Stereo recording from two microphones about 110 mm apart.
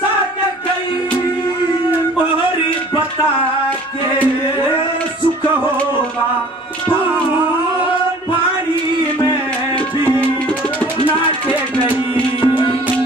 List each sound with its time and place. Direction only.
12.4 s music: 50° left (ahead or behind)